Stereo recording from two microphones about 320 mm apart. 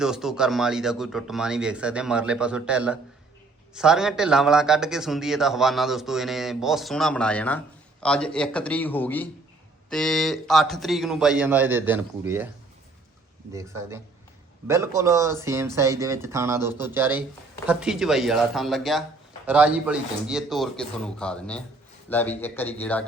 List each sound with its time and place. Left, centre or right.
0.0 s a man's voice: centre
13.5 s a man's voice: centre